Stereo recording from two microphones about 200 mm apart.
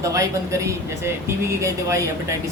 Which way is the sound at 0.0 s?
15° right (ahead or behind).